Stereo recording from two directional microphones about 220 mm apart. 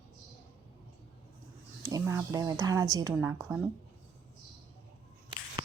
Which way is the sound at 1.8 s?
15° right (ahead or behind).